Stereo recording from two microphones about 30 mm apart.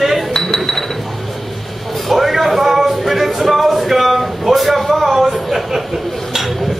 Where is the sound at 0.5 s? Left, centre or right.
Centre.